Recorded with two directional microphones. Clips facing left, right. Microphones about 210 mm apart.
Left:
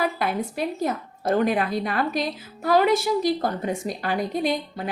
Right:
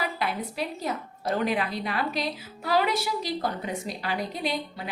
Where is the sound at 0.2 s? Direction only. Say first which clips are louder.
Left 4 dB; 50° left (ahead or behind).